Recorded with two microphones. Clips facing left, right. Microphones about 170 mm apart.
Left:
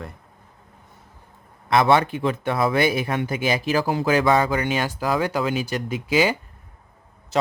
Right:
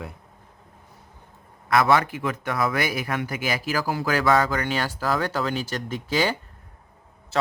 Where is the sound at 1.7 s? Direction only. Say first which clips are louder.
Left 2 dB; 25° left (ahead or behind).